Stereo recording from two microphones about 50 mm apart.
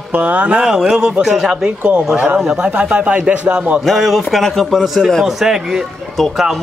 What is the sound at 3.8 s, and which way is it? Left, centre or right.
Speech, centre.